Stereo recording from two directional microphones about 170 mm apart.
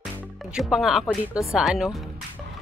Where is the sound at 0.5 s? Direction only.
5° right (ahead or behind).